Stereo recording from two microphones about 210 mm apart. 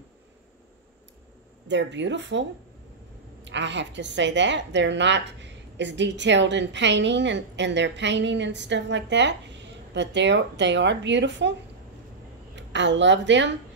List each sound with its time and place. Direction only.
1.7 s a woman's voice: 60° right (ahead or behind)
3.4 s a woman's voice: 55° right (ahead or behind)
12.5 s a woman's voice: 60° right (ahead or behind)